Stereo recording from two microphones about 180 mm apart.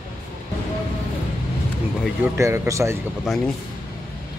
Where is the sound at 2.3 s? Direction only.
15° right (ahead or behind).